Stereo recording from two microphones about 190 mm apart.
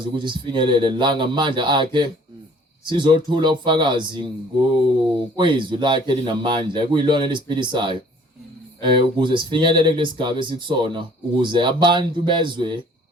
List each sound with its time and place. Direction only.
0.0 s speech: 25° right (ahead or behind)
5.4 s speech: 25° right (ahead or behind)